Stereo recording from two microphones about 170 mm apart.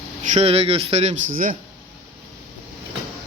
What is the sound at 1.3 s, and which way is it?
Speech, 50° right (ahead or behind).